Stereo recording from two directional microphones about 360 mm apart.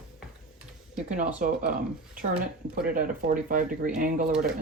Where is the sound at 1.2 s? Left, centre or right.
Right.